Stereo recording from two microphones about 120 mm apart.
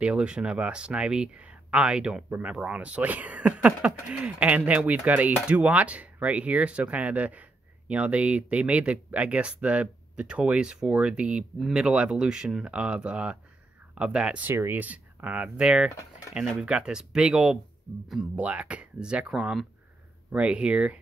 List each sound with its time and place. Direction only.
0.0 s speech: 10° right (ahead or behind)